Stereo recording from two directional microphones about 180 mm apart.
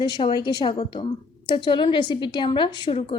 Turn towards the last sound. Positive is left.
turn(degrees=25)  # may be behind; listen again after turning